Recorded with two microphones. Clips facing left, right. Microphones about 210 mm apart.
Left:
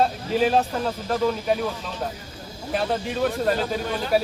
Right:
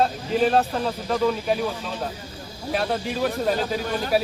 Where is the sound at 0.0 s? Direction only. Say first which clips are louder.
Even; centre (ahead or behind).